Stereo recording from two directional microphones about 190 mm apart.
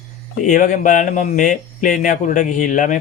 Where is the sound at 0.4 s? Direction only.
40° left (ahead or behind).